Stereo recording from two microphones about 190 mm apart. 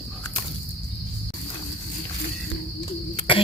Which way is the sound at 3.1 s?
30° left (ahead or behind).